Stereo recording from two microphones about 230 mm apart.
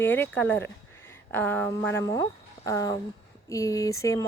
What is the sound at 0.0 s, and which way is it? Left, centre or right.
Speech, centre.